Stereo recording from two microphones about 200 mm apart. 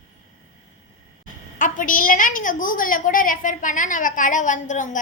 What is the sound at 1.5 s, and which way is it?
A woman's voice, 40° left (ahead or behind).